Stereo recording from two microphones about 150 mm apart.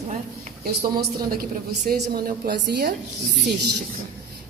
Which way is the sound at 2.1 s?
90° right.